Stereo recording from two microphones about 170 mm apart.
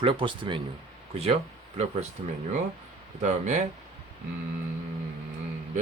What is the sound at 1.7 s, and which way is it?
Speech, 40° right (ahead or behind).